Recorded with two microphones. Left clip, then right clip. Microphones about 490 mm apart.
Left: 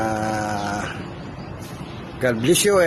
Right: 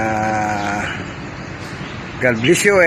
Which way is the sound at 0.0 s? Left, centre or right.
Left.